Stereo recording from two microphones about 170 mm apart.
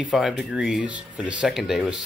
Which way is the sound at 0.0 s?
Centre (ahead or behind).